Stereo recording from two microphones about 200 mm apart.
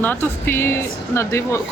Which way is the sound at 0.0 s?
10° left (ahead or behind).